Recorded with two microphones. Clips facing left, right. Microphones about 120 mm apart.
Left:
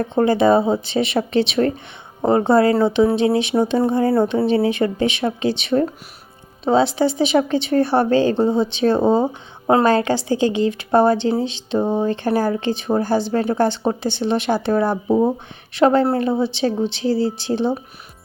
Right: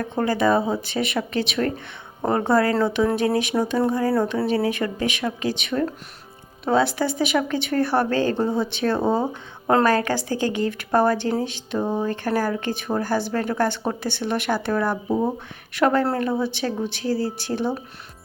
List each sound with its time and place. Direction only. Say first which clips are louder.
0.0 s speech: left 5 dB; 25° left (ahead or behind)